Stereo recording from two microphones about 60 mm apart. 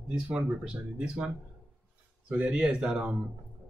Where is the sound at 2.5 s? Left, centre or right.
Centre.